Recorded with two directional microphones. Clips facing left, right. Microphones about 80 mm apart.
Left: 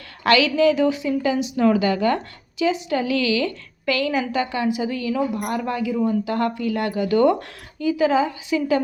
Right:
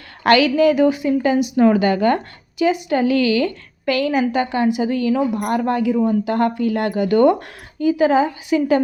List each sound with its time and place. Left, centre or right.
0.3 s a woman's voice: right
6.0 s speech: right